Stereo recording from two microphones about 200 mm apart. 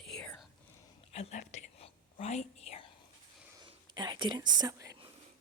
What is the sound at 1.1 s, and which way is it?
Whispering, 30° left (ahead or behind).